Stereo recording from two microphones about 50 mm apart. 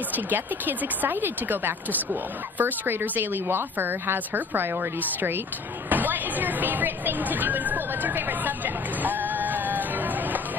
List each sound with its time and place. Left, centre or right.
0.1 s a woman's voice: right
5.9 s speech: right